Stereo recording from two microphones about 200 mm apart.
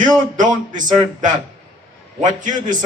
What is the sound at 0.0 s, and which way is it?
A man's voice, 40° right (ahead or behind).